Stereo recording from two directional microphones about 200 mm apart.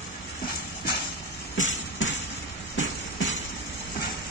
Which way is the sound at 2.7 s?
70° left (ahead or behind).